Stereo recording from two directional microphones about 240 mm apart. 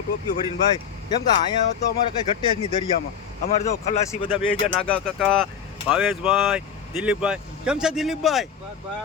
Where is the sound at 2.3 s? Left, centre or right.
Left.